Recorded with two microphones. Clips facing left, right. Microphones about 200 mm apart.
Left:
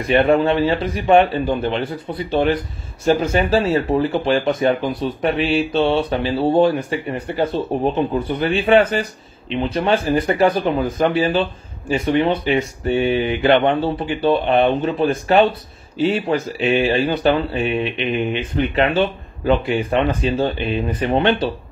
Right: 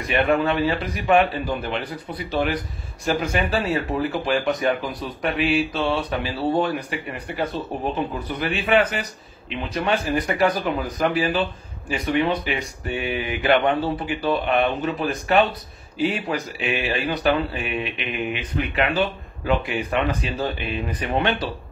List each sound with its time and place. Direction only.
0.0 s speech: 25° left (ahead or behind)